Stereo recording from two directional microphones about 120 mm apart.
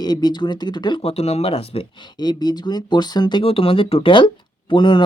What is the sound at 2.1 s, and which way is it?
Speech, 35° left (ahead or behind).